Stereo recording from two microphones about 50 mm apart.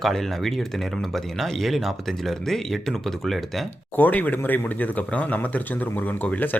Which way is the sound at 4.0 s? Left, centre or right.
Left.